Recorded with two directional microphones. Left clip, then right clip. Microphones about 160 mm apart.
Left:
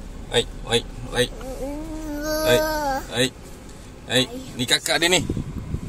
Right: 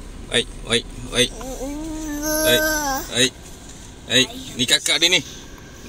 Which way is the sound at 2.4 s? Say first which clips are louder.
Right 1 dB; centre (ahead or behind).